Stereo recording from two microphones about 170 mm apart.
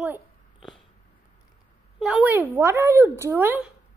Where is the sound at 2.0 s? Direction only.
5° right (ahead or behind).